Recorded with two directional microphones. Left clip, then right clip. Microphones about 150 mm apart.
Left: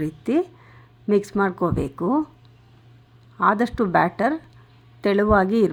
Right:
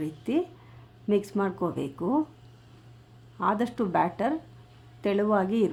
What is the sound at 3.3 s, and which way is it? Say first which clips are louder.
Speech: left 8 dB; 25° left (ahead or behind).